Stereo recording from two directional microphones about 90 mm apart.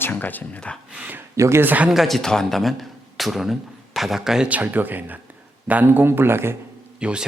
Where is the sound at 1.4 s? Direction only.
30° right (ahead or behind).